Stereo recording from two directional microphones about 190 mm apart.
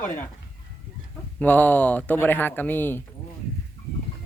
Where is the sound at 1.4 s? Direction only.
10° left (ahead or behind).